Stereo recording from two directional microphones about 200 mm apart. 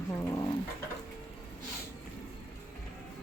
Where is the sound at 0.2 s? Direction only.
15° left (ahead or behind).